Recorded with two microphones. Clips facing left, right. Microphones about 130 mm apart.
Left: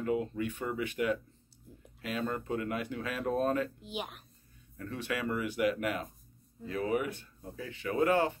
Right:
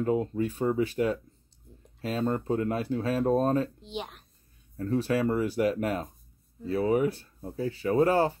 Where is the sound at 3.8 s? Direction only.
5° left (ahead or behind).